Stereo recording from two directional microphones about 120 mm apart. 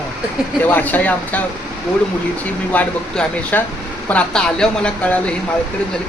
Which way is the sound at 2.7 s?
15° left (ahead or behind).